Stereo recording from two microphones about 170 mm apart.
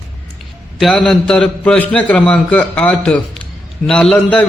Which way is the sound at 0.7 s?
5° left (ahead or behind).